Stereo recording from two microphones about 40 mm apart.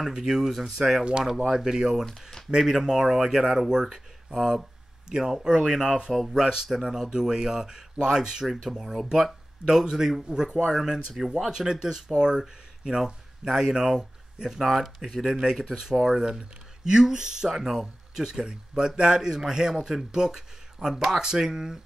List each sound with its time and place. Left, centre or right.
0.1 s speech: centre
5.6 s speech: centre
6.3 s speech: centre
14.6 s speech: centre
15.7 s speech: centre